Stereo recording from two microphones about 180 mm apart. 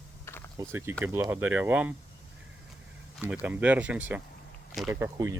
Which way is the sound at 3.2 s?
10° right (ahead or behind).